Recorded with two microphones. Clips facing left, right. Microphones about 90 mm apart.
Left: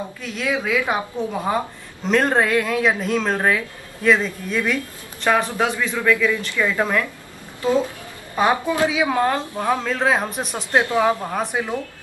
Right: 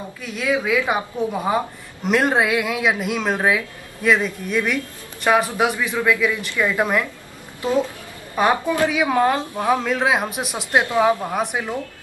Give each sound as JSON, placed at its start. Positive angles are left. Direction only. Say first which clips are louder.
{"t": 0.2, "sound": "a woman's voice", "louder": "right 3 dB", "side_deg": -5}
{"t": 8.6, "sound": "a woman's voice", "louder": "even", "side_deg": 15}
{"t": 8.9, "sound": "speech", "louder": "right 1 dB", "side_deg": -10}
{"t": 11.2, "sound": "a woman's voice", "louder": "even", "side_deg": -5}